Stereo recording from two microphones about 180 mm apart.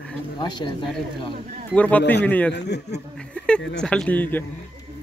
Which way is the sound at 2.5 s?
70° left (ahead or behind).